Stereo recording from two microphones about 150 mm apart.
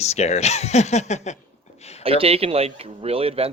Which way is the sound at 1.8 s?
45° left (ahead or behind).